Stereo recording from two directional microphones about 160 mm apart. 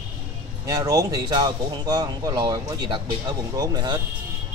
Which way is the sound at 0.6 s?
20° right (ahead or behind).